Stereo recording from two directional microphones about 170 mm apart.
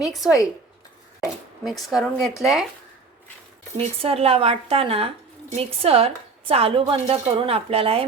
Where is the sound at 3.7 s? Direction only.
35° right (ahead or behind).